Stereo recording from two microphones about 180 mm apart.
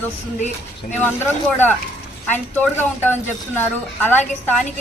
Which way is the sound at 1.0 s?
10° left (ahead or behind).